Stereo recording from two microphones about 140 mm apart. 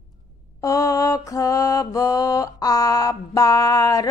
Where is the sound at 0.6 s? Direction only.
25° left (ahead or behind).